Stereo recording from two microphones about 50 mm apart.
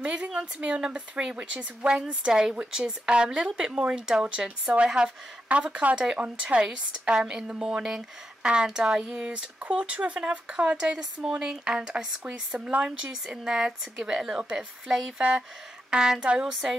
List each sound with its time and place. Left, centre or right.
0.0 s speech: centre
7.8 s speech: centre